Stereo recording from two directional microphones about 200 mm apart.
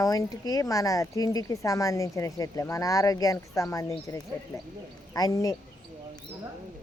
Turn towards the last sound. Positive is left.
turn(degrees=15)  # may be behind; listen again after turning